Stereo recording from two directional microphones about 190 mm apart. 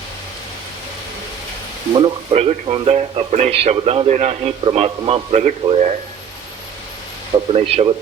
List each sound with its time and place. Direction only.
2.0 s speech: 35° right (ahead or behind)
7.5 s speech: 30° right (ahead or behind)